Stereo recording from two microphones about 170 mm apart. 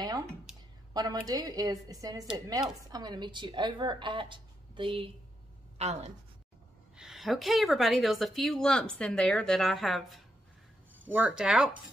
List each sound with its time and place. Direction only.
0.9 s a woman's voice: 20° right (ahead or behind); by 6.1 s 40° right (ahead or behind)
7.0 s a woman's voice: centre (ahead or behind)